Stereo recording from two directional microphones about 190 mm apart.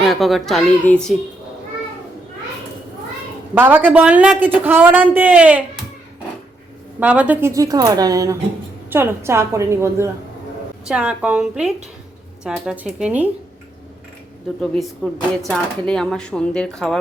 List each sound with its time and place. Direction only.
0.1 s speech: centre (ahead or behind)
3.5 s speech: 10° right (ahead or behind)
7.0 s speech: 5° right (ahead or behind)
14.6 s speech: 5° left (ahead or behind)